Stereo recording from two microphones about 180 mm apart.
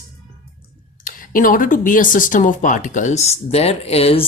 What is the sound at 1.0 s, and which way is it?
Speech, 50° left (ahead or behind).